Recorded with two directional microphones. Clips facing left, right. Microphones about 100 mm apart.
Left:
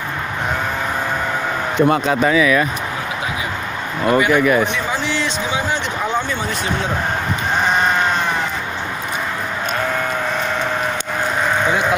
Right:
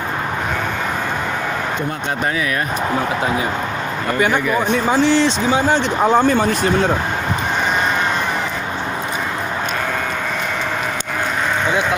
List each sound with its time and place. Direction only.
5.0 s speech: 35° right (ahead or behind)